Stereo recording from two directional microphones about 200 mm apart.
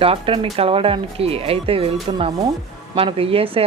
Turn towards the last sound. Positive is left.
turn(degrees=-30)  # may be behind; listen again after turning